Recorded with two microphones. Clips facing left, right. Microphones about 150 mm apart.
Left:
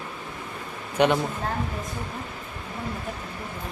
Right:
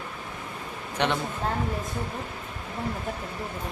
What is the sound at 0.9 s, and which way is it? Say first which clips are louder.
Speech: left 6 dB; 10° left (ahead or behind).